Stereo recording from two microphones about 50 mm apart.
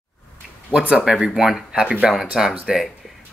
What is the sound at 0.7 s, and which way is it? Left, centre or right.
Speech, centre.